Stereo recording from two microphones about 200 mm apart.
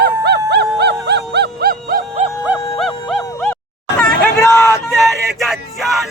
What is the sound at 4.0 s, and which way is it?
Hubbub, 10° left (ahead or behind).